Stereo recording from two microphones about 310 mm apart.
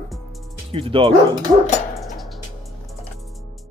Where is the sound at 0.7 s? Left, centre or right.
Centre.